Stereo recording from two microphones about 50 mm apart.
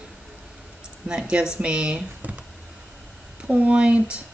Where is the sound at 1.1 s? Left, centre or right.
Centre.